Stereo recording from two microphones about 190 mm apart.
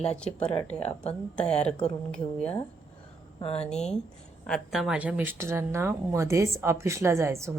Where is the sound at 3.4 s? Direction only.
30° left (ahead or behind).